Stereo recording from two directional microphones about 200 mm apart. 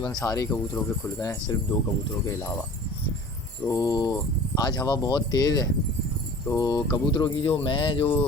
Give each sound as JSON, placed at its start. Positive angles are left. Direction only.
{"t": 0.2, "sound": "speech", "side_deg": 15}
{"t": 3.7, "sound": "speech", "side_deg": 15}